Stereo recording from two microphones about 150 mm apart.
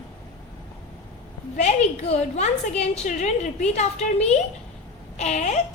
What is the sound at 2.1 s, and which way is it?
A woman's voice, 50° left (ahead or behind).